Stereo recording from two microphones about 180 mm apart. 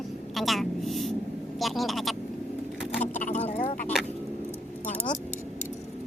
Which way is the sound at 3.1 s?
40° left (ahead or behind).